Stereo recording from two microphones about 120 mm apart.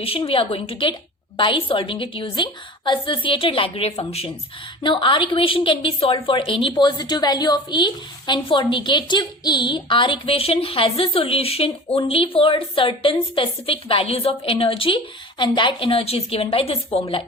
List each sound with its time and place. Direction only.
0.0 s a woman's voice: 50° left (ahead or behind)
4.8 s a woman's voice: 40° left (ahead or behind)